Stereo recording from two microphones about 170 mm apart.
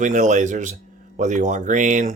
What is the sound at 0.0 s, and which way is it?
Speech, 45° right (ahead or behind).